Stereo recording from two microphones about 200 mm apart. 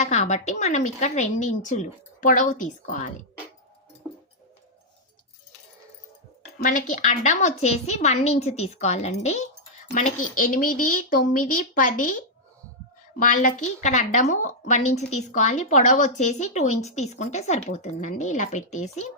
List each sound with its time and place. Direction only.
0.0 s a woman's voice: 35° left (ahead or behind)
6.6 s a woman's voice: 40° left (ahead or behind)